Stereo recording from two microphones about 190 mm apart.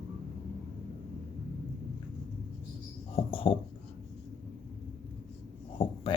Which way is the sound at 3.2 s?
30° left (ahead or behind).